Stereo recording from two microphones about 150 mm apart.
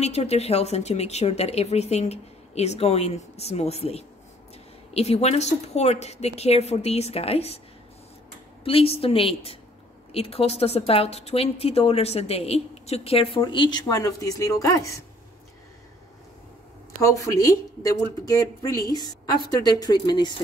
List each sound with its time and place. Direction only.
0.0 s speech: 45° left (ahead or behind)
8.6 s a woman's voice: 40° left (ahead or behind)
13.8 s speech: 25° left (ahead or behind)
17.0 s speech: 20° left (ahead or behind)